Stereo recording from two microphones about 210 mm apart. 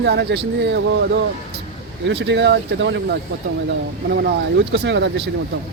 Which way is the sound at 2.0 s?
55° right (ahead or behind).